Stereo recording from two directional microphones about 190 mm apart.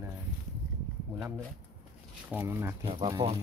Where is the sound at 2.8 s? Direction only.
25° right (ahead or behind).